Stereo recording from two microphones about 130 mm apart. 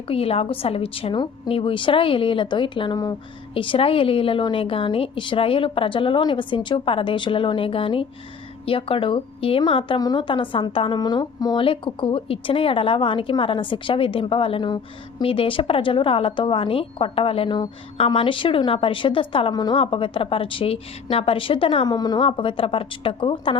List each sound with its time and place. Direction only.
0.1 s a woman's voice: 50° left (ahead or behind); by 3.2 s 30° left (ahead or behind)
3.5 s a woman's voice: 45° left (ahead or behind)
11.6 s a woman's voice: 40° left (ahead or behind)
21.8 s a woman's voice: 30° left (ahead or behind)
22.2 s a woman's voice: 45° left (ahead or behind)